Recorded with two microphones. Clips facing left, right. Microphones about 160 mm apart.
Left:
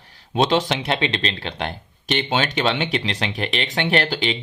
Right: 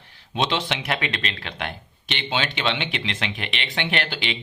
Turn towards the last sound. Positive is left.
turn(degrees=40)  # may be behind; listen again after turning